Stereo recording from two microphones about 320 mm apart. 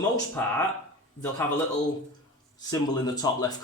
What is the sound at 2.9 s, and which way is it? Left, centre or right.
Speech, centre.